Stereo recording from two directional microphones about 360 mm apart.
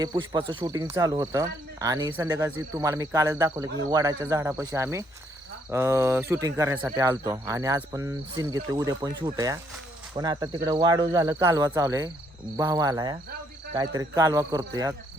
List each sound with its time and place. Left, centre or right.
0.0 s speech: centre